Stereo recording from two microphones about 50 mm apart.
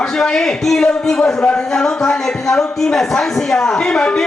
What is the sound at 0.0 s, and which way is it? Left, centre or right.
Speech, centre.